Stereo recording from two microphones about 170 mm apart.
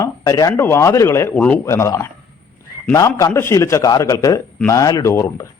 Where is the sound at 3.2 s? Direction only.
15° left (ahead or behind).